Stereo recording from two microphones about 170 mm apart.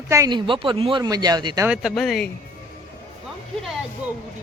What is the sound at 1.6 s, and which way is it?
Speech, 5° right (ahead or behind).